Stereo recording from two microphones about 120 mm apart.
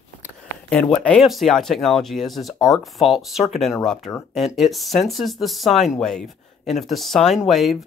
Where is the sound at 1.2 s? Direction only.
Centre (ahead or behind).